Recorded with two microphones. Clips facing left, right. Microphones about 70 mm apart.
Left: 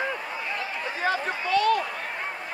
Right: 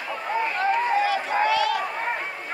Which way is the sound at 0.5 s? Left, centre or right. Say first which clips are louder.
Right 10 dB; right.